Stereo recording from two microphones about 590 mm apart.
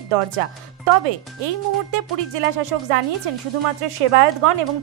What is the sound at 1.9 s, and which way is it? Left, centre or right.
Speech, right.